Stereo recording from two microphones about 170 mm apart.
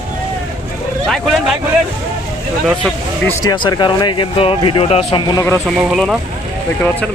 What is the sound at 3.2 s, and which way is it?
Speech, 25° left (ahead or behind).